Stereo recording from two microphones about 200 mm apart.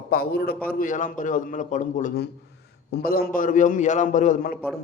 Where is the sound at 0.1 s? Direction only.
50° left (ahead or behind).